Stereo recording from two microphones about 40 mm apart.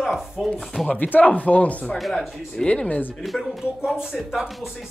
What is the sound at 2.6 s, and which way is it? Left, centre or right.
Speech, left.